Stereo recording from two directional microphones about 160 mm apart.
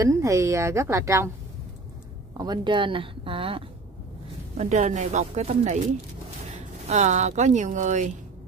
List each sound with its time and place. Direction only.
0.0 s a woman's voice: 20° right (ahead or behind)
2.3 s speech: 25° right (ahead or behind)
4.6 s speech: 50° right (ahead or behind)